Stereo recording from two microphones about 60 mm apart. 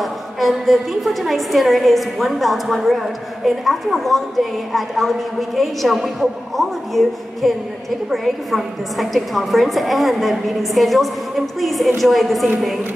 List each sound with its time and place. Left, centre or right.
0.0 s a woman's voice: centre